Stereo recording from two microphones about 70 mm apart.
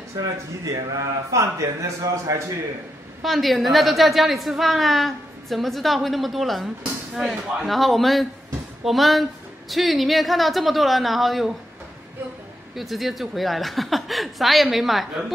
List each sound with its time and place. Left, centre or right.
0.1 s speech: right
3.2 s a woman's voice: centre
12.7 s a woman's voice: centre